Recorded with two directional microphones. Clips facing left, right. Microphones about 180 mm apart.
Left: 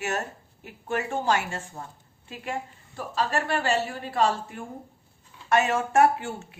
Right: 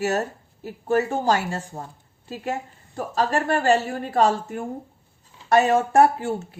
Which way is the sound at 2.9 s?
45° right (ahead or behind).